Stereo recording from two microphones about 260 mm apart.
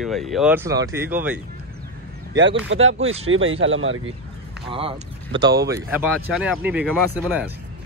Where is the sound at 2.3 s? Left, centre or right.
Right.